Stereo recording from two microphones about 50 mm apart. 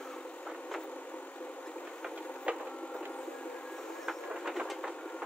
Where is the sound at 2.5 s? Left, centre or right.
Right.